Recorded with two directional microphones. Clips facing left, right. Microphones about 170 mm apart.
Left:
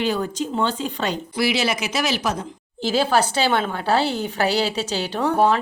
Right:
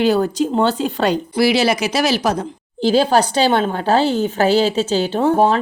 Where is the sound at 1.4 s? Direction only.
35° right (ahead or behind).